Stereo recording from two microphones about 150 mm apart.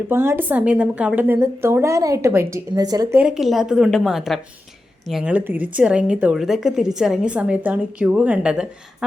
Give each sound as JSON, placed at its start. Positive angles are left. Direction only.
{"t": 0.1, "sound": "a woman's voice", "side_deg": -15}
{"t": 3.2, "sound": "a woman's voice", "side_deg": -5}